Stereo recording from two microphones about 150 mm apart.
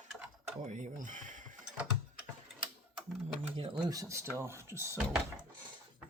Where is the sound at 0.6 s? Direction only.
55° right (ahead or behind).